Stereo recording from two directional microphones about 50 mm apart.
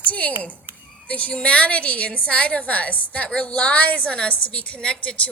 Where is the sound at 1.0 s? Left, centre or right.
Left.